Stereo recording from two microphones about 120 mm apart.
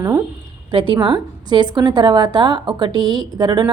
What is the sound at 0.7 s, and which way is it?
A woman's voice, 45° right (ahead or behind).